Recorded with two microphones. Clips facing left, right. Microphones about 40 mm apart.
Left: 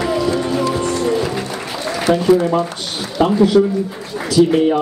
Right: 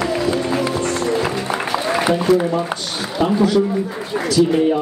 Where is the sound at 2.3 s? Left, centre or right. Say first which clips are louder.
Left 3 dB; centre.